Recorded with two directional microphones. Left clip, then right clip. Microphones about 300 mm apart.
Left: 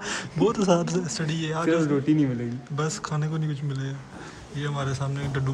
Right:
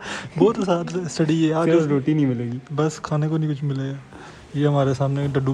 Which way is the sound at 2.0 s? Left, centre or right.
Right.